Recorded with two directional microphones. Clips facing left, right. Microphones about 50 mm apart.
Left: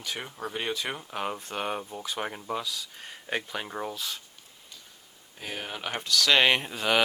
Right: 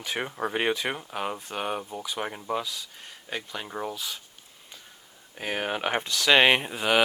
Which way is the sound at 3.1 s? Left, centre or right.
Centre.